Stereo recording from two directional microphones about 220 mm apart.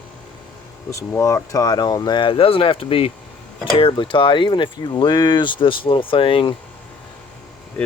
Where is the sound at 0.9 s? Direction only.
15° left (ahead or behind).